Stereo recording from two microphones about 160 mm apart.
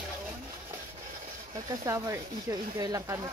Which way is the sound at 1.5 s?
20° right (ahead or behind).